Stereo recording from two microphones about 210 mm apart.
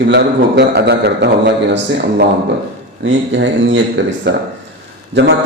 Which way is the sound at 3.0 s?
60° right (ahead or behind).